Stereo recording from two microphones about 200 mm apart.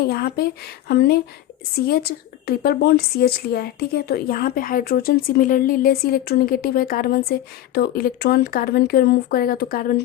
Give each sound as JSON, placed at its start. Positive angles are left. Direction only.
{"t": 0.1, "sound": "a woman's voice", "side_deg": 50}